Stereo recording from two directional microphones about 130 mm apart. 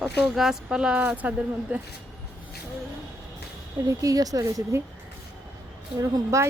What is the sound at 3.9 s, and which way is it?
Speech, 25° right (ahead or behind).